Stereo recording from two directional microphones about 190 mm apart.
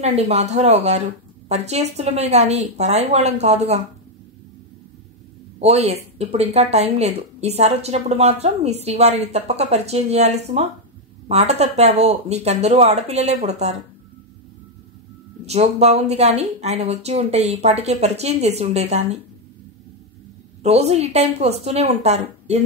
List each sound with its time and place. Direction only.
0.0 s speech: 35° right (ahead or behind)
5.6 s speech: 35° right (ahead or behind)
15.4 s speech: 35° right (ahead or behind)
20.6 s speech: 35° right (ahead or behind)